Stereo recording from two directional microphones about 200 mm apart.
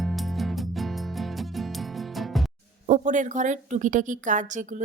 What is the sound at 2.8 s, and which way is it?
A woman's voice, 40° right (ahead or behind).